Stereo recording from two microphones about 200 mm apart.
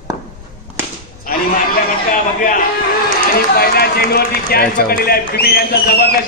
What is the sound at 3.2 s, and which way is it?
A man's voice, 50° left (ahead or behind).